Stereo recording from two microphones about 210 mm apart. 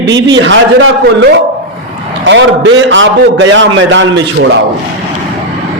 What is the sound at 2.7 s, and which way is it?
A man's voice, 60° right (ahead or behind).